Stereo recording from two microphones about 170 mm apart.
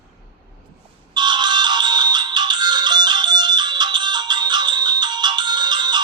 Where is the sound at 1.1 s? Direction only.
25° right (ahead or behind).